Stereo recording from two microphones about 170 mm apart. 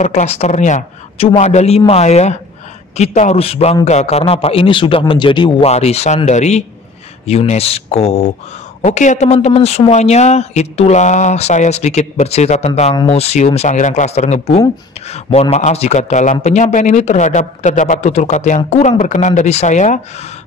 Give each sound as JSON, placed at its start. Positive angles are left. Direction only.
{"t": 0.0, "sound": "a man's voice", "side_deg": 40}